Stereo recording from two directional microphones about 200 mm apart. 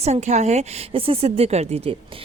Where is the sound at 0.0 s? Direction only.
35° right (ahead or behind).